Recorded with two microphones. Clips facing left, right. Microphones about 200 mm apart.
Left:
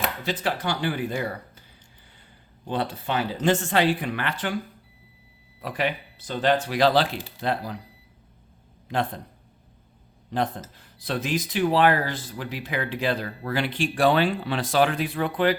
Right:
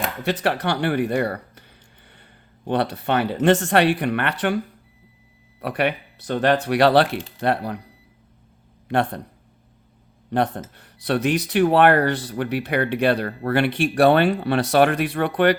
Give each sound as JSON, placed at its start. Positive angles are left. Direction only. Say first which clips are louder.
{"t": 0.4, "sound": "speech", "louder": "right 4 dB", "side_deg": -65}
{"t": 2.6, "sound": "speech", "louder": "right 6 dB", "side_deg": -65}
{"t": 5.5, "sound": "speech", "louder": "right 5 dB", "side_deg": -65}
{"t": 8.9, "sound": "speech", "louder": "right 5 dB", "side_deg": -70}
{"t": 10.3, "sound": "speech", "louder": "right 5 dB", "side_deg": -70}